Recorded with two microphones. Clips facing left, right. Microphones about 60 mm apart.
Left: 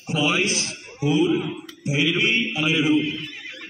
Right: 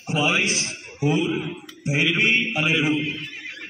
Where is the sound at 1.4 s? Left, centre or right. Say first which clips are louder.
Left 2 dB; centre.